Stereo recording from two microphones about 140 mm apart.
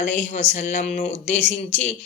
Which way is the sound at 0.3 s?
60° left (ahead or behind).